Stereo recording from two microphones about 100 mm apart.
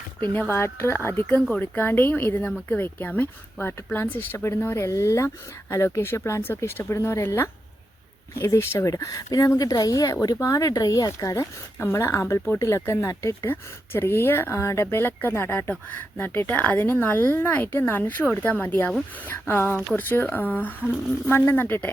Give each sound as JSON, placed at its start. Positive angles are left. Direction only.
{"t": 0.2, "sound": "speech", "side_deg": 20}
{"t": 1.4, "sound": "speech", "side_deg": 10}
{"t": 1.6, "sound": "speech", "side_deg": 20}